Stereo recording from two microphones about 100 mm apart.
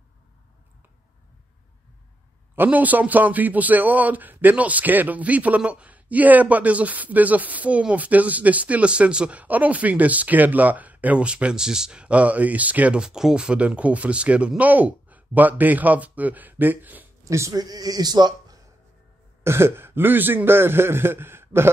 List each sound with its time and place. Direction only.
2.5 s a man's voice: 20° right (ahead or behind)
17.2 s speech: 30° right (ahead or behind)
19.4 s a man's voice: 25° right (ahead or behind)